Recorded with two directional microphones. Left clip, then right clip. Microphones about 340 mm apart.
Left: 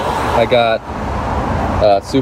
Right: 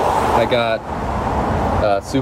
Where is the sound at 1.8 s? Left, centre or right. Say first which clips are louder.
Left 9 dB; centre.